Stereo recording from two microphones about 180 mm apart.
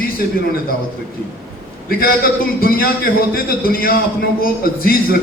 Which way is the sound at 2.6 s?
55° left (ahead or behind).